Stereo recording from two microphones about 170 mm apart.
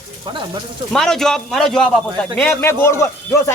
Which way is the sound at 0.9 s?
5° left (ahead or behind).